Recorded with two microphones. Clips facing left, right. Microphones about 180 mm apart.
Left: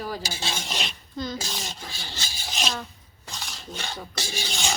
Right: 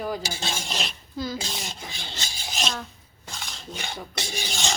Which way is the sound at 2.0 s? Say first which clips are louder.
Right 1 dB; 20° right (ahead or behind).